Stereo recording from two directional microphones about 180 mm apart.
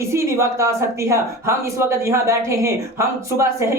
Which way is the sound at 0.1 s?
15° right (ahead or behind).